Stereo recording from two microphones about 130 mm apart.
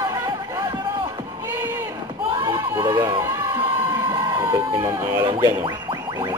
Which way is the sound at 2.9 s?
25° right (ahead or behind).